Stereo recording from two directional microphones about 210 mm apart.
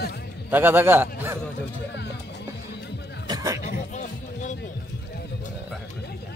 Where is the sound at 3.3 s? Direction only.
20° right (ahead or behind).